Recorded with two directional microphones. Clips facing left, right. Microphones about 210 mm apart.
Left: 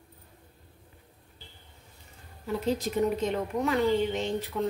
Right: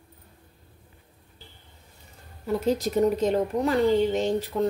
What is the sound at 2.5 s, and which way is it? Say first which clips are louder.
A woman's voice: right 4 dB; 40° right (ahead or behind).